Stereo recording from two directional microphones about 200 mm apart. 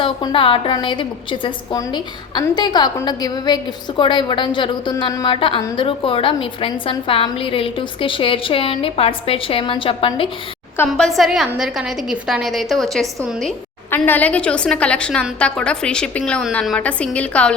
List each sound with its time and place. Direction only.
0.0 s a woman's voice: 25° left (ahead or behind)
10.8 s a woman's voice: centre (ahead or behind)